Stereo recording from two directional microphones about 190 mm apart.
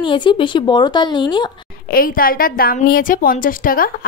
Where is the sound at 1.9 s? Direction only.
50° left (ahead or behind).